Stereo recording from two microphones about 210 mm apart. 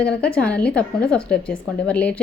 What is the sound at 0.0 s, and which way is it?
A woman's voice, 5° left (ahead or behind).